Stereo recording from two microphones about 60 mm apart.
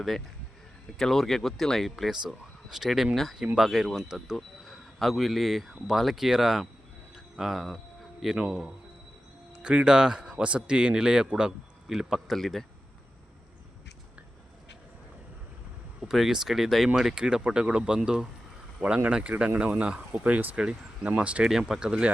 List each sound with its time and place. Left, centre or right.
0.9 s speech: centre
2.0 s a man's voice: centre
16.0 s a man's voice: centre
21.4 s a man's voice: centre